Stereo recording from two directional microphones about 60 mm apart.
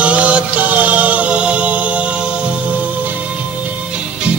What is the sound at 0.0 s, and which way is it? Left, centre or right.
Music, right.